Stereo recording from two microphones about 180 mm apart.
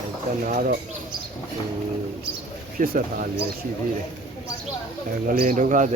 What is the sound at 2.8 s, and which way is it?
Speech, 50° right (ahead or behind).